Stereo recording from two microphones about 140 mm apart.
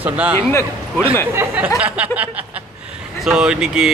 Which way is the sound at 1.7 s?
10° right (ahead or behind).